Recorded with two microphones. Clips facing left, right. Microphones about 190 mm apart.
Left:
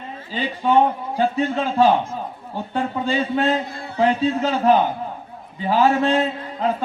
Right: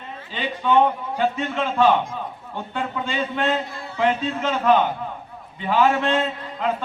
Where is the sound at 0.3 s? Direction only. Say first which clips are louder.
Left 2 dB; 35° left (ahead or behind).